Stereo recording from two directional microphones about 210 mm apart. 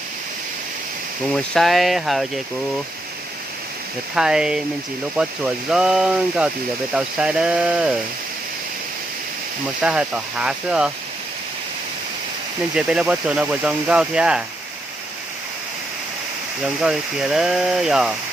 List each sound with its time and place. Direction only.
1.3 s speech: centre (ahead or behind)
4.1 s speech: 5° right (ahead or behind)
5.7 s speech: 5° right (ahead or behind)
9.8 s speech: 5° right (ahead or behind)
12.7 s speech: 5° right (ahead or behind)
16.6 s speech: 5° right (ahead or behind)